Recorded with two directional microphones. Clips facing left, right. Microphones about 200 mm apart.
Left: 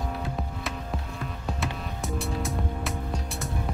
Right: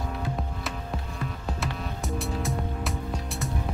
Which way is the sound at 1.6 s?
Centre (ahead or behind).